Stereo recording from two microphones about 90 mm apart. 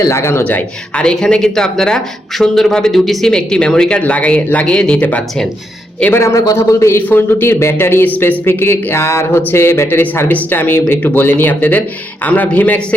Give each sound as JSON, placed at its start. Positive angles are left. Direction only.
{"t": 0.0, "sound": "speech", "side_deg": 30}
{"t": 0.4, "sound": "speech", "side_deg": 15}
{"t": 6.1, "sound": "speech", "side_deg": 35}